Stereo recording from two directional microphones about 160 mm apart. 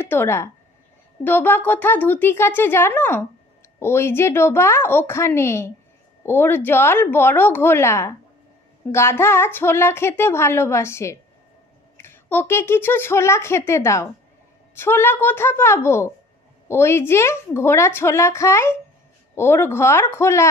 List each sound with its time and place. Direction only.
0.0 s a woman's voice: 15° left (ahead or behind)